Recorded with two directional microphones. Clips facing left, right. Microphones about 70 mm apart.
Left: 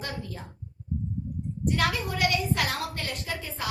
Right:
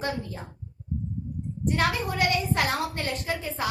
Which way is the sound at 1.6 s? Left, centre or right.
Right.